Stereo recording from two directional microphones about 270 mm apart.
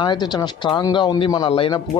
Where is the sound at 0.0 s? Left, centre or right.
Centre.